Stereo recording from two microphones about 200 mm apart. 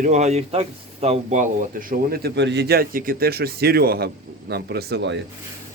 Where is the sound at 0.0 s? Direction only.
35° right (ahead or behind); by 5.1 s 55° right (ahead or behind).